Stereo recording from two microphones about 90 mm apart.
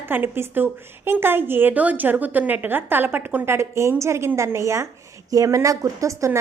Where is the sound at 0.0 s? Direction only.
25° right (ahead or behind).